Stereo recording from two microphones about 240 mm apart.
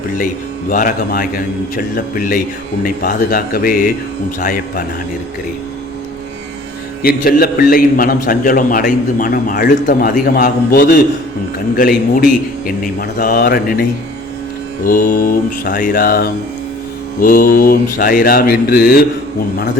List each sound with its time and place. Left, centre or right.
0.7 s a man's voice: left
7.0 s a man's voice: left
14.8 s a man's voice: left